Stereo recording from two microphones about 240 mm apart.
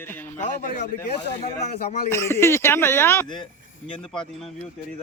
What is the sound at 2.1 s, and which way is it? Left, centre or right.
Speech, centre.